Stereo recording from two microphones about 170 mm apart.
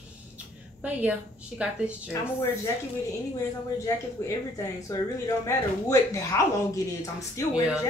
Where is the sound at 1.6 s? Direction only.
10° right (ahead or behind).